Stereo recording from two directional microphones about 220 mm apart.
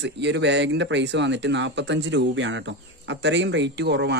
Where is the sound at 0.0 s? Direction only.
50° right (ahead or behind).